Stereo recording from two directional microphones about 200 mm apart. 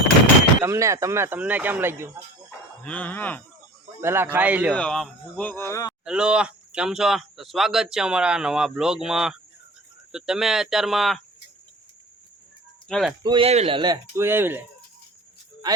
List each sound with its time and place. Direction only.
0.6 s speech: 15° right (ahead or behind)
2.8 s speech: 5° left (ahead or behind)
4.0 s speech: 10° right (ahead or behind)
4.7 s speech: 5° left (ahead or behind)
6.1 s speech: 5° right (ahead or behind)
12.9 s speech: centre (ahead or behind)
13.2 s speech: 25° right (ahead or behind); by 14.6 s 10° right (ahead or behind)